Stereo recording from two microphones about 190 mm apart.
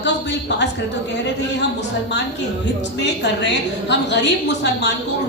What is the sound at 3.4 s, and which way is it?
Speech, 65° left (ahead or behind).